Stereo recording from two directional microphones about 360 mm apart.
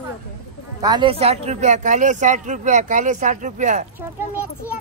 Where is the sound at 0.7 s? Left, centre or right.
Centre.